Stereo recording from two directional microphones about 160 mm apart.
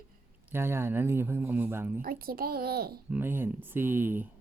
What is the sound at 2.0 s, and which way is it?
A child's voice, 65° right (ahead or behind).